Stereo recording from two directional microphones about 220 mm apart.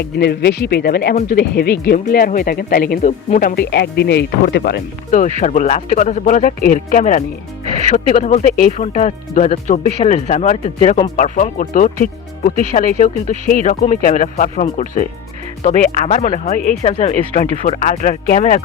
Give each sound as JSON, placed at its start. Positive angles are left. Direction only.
{"t": 0.0, "sound": "speech", "side_deg": 50}